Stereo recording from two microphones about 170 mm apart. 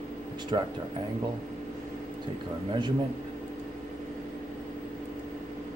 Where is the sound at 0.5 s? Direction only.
30° right (ahead or behind).